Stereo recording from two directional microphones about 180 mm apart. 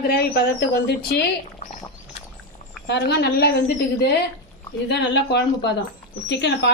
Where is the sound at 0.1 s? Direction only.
60° left (ahead or behind).